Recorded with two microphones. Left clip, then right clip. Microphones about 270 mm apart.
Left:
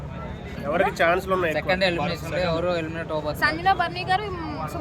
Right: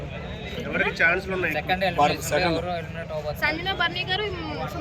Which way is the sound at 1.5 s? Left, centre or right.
Left.